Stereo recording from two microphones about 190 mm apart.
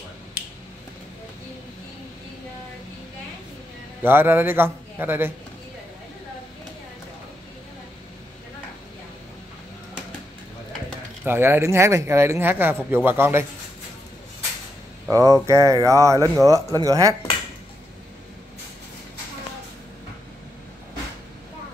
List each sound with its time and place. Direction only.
0.4 s finger snapping: 40° left (ahead or behind)
4.0 s speech: 10° right (ahead or behind)
11.2 s speech: 10° right (ahead or behind)
15.0 s speech: 15° right (ahead or behind)